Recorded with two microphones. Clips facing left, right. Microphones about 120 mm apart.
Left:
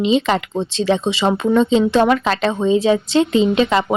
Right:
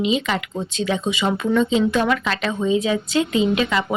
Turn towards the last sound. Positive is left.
turn(degrees=35)  # may be behind; listen again after turning